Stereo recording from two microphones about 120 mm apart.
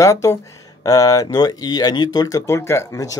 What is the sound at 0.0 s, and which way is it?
Speech, 25° left (ahead or behind).